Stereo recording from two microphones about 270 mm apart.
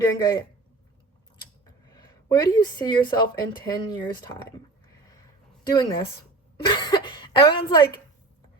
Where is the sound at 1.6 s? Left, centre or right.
Centre.